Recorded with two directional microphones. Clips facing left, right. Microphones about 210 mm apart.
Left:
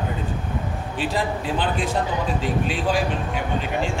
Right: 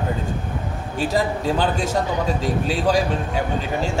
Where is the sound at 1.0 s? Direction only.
45° right (ahead or behind).